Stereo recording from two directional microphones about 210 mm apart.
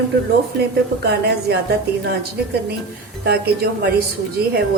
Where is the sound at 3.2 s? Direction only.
50° right (ahead or behind).